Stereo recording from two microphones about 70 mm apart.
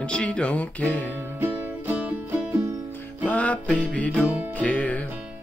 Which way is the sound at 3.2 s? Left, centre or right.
Left.